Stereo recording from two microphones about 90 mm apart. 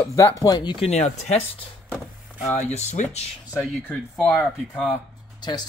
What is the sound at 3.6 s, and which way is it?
Speech, 15° left (ahead or behind).